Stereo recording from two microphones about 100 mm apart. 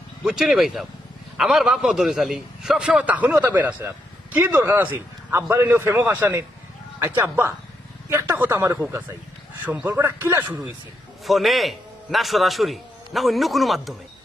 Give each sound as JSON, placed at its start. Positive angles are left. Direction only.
{"t": 0.3, "sound": "a man's voice", "side_deg": -5}
{"t": 9.8, "sound": "a man's voice", "side_deg": -20}
{"t": 11.3, "sound": "a man's voice", "side_deg": 0}